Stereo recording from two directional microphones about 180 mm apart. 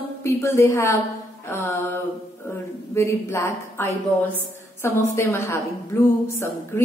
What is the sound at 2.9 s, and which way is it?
A woman's voice, 15° left (ahead or behind).